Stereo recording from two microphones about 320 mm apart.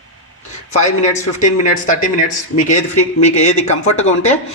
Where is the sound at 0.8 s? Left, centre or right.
Left.